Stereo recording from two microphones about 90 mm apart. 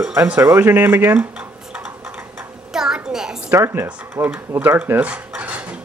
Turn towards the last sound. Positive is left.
turn(degrees=-15)  # may be behind; listen again after turning